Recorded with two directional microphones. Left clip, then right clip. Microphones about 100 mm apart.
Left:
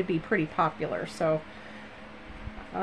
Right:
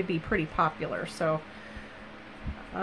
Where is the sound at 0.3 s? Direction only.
35° left (ahead or behind).